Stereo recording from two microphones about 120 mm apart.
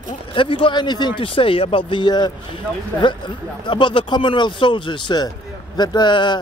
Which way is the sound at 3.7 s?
40° left (ahead or behind).